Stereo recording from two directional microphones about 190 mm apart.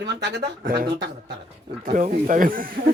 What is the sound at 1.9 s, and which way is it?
Speech, 40° right (ahead or behind).